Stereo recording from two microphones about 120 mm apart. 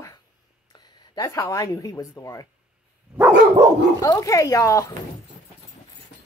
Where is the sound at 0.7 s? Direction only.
35° left (ahead or behind).